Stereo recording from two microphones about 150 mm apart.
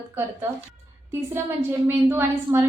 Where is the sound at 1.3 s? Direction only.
15° right (ahead or behind).